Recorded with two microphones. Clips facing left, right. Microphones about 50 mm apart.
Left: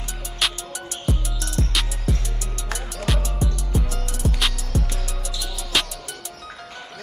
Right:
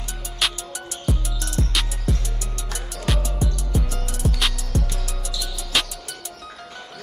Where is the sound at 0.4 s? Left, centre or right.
Centre.